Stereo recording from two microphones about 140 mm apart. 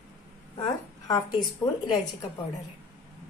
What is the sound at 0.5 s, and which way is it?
A woman's voice, 30° left (ahead or behind).